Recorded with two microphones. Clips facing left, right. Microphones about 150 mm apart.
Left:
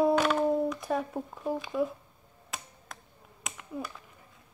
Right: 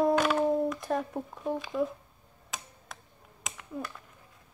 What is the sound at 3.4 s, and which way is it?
Finger snapping, centre (ahead or behind).